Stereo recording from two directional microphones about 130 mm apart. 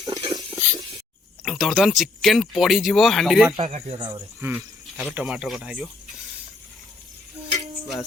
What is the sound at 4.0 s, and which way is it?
Speech, 35° right (ahead or behind).